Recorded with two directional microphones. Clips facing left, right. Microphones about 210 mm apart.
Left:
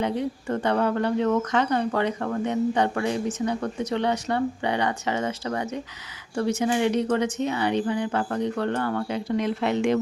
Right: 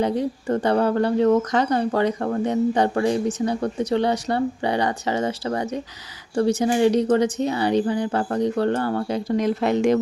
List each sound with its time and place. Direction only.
0.0 s speech: 35° right (ahead or behind)